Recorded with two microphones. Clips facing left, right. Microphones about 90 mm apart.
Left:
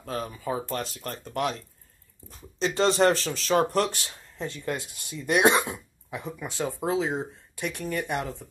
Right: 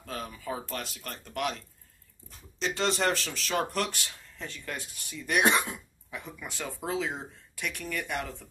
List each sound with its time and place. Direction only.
0.0 s speech: 35° left (ahead or behind)
2.6 s speech: 35° left (ahead or behind)